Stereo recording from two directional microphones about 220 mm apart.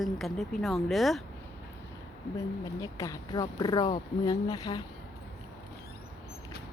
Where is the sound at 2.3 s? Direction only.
15° left (ahead or behind).